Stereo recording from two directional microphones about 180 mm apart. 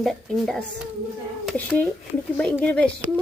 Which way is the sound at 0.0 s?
Centre (ahead or behind).